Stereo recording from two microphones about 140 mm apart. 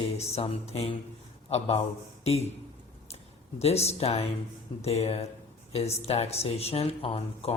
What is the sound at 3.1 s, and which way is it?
Speech, 50° left (ahead or behind).